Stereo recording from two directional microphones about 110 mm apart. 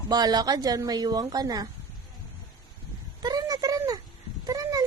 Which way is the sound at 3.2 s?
35° right (ahead or behind).